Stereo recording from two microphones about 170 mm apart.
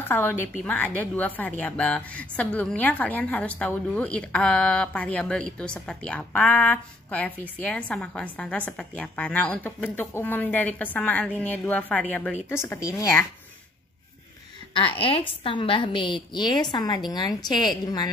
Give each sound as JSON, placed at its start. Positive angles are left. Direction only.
{"t": 0.1, "sound": "a woman's voice", "side_deg": 10}
{"t": 14.7, "sound": "a woman's voice", "side_deg": 30}